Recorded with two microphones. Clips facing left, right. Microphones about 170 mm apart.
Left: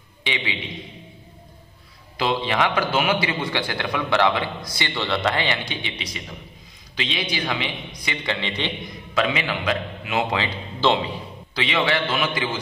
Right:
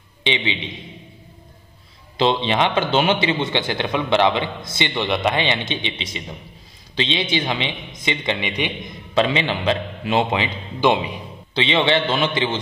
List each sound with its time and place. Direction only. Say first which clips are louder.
0.2 s a man's voice: right 5 dB; 25° right (ahead or behind)
2.1 s a man's voice: right 4 dB; 25° right (ahead or behind)
9.1 s a man's voice: right 4 dB; 30° right (ahead or behind)
10.4 s a man's voice: right 3 dB; 15° right (ahead or behind)